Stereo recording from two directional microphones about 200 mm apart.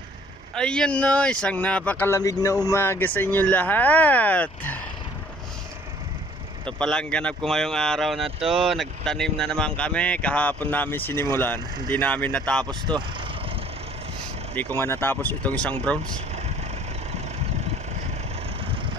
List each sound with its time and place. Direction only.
0.6 s speech: 5° left (ahead or behind)
6.8 s speech: 5° left (ahead or behind)
12.6 s speech: 20° right (ahead or behind)
14.5 s speech: 10° left (ahead or behind)